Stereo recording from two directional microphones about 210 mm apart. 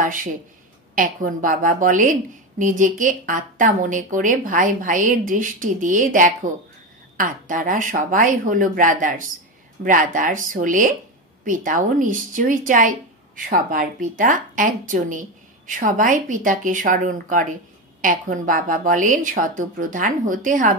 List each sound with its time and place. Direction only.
0.0 s a woman's voice: 40° right (ahead or behind)